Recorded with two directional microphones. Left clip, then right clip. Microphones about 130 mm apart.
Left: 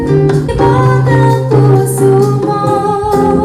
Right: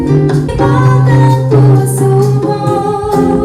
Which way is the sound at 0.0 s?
25° left (ahead or behind).